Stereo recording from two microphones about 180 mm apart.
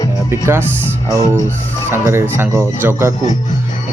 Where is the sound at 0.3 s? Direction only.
15° right (ahead or behind).